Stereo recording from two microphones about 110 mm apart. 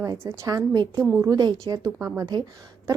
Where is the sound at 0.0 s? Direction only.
30° right (ahead or behind).